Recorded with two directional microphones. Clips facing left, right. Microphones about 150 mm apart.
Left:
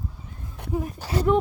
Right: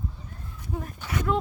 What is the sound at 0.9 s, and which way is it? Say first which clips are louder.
Speech: left 5 dB; 35° left (ahead or behind).